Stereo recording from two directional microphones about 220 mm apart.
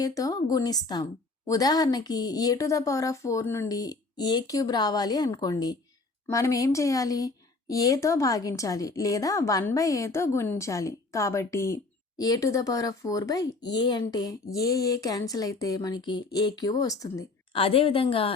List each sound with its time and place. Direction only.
0.0 s a woman's voice: 15° left (ahead or behind)